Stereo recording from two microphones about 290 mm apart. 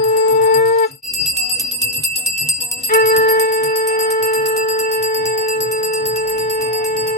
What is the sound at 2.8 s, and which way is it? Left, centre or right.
Music, left.